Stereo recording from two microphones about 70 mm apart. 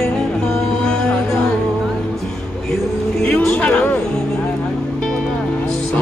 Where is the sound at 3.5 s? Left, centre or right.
Left.